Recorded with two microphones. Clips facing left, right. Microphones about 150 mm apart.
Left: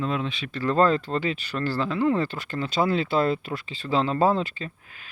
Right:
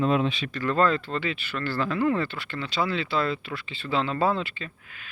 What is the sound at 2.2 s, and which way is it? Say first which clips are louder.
Speech: left 3 dB; 40° left (ahead or behind).